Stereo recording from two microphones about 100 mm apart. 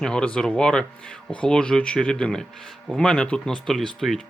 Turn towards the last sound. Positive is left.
turn(degrees=5)  # may be behind; listen again after turning